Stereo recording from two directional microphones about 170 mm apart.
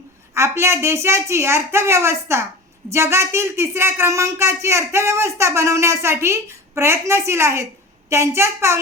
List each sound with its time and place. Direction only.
0.3 s speech: 15° right (ahead or behind)